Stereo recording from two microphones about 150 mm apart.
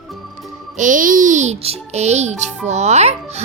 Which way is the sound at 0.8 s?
60° right (ahead or behind).